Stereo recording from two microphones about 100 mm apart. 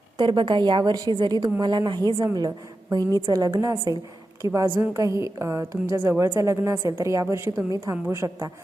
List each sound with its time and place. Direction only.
0.2 s a woman's voice: 55° right (ahead or behind); by 8.4 s 30° right (ahead or behind)